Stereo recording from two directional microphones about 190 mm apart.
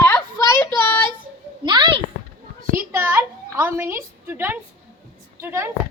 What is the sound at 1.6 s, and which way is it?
Speech, 25° right (ahead or behind).